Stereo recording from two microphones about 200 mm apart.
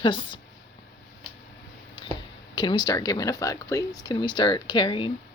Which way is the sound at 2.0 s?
20° left (ahead or behind).